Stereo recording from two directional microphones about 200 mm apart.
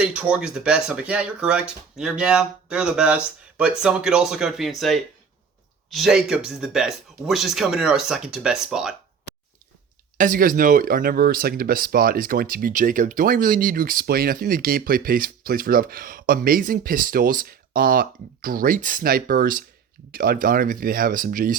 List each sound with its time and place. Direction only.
0.0 s speech: 5° right (ahead or behind)
10.2 s speech: 45° right (ahead or behind)